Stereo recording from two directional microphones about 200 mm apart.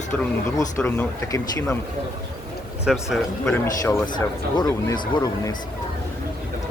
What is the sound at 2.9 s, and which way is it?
Speech, centre (ahead or behind).